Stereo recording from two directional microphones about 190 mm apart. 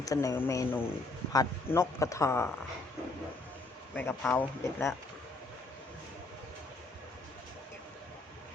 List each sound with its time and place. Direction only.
0.0 s speech: 15° left (ahead or behind)
3.9 s speech: 10° left (ahead or behind)